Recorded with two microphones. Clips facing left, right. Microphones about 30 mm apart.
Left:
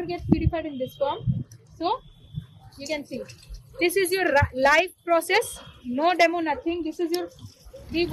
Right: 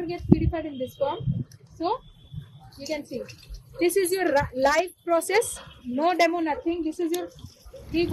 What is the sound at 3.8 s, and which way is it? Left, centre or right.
Speech, left.